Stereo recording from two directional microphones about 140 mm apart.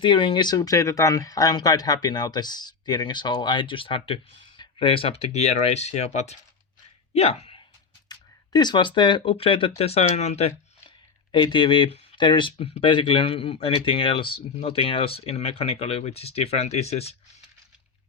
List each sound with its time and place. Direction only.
0.0 s speech: 35° left (ahead or behind)
8.1 s speech: 30° left (ahead or behind); by 10.5 s 50° left (ahead or behind)
11.3 s speech: 35° left (ahead or behind)